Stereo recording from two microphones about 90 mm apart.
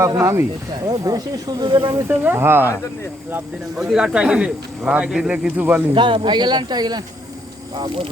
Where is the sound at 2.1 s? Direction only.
25° right (ahead or behind).